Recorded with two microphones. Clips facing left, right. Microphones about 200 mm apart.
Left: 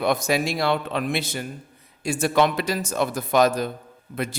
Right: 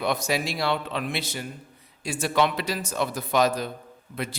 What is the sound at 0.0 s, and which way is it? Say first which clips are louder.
A man's voice: left 4 dB; 50° left (ahead or behind).